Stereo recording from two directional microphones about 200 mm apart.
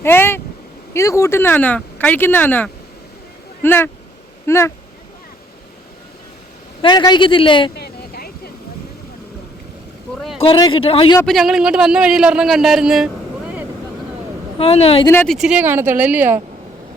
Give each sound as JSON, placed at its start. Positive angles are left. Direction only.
{"t": 0.0, "sound": "speech", "side_deg": 10}
{"t": 6.8, "sound": "a man's voice", "side_deg": 20}
{"t": 7.8, "sound": "vehicle", "side_deg": 50}
{"t": 10.3, "sound": "a man's voice", "side_deg": 25}
{"t": 11.2, "sound": "a man's voice", "side_deg": 0}
{"t": 14.6, "sound": "a man's voice", "side_deg": 30}
{"t": 15.0, "sound": "speech", "side_deg": 10}
{"t": 15.4, "sound": "speech", "side_deg": -5}